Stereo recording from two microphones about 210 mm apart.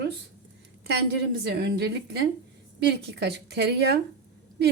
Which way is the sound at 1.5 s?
50° right (ahead or behind).